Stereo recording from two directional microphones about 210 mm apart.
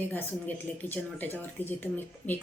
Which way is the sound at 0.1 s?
10° left (ahead or behind).